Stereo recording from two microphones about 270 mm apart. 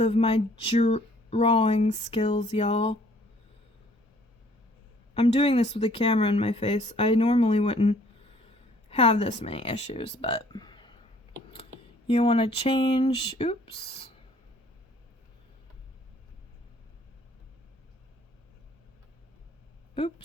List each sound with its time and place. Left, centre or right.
0.0 s speech: left
5.1 s speech: left
12.0 s speech: left
19.9 s speech: left